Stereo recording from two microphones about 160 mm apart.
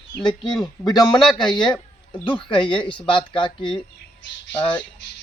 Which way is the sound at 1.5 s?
30° left (ahead or behind).